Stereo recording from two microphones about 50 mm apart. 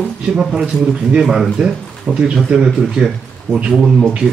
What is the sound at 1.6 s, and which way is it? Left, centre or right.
Speech, centre.